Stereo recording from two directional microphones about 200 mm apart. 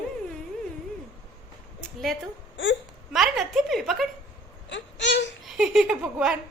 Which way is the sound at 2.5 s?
70° left (ahead or behind).